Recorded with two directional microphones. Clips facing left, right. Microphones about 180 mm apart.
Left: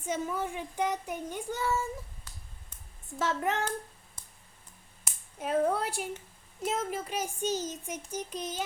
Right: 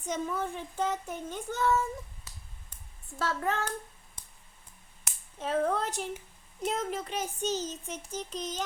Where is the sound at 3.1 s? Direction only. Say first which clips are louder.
Left 1 dB; 20° left (ahead or behind).